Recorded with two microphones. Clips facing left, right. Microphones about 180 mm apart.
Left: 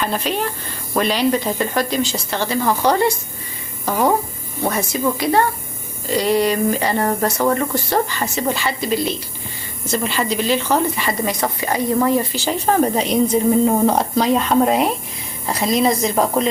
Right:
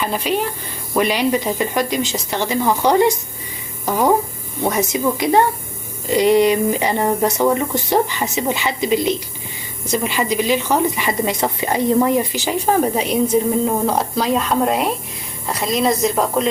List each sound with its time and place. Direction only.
0.0 s a woman's voice: 10° right (ahead or behind)